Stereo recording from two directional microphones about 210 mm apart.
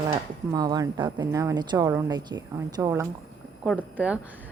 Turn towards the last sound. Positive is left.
turn(degrees=-5)  # may be behind; listen again after turning